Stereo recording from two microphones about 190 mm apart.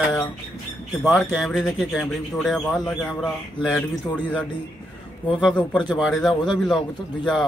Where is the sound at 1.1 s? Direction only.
Centre (ahead or behind).